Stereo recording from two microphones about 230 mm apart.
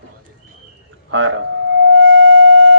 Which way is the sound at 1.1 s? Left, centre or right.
Right.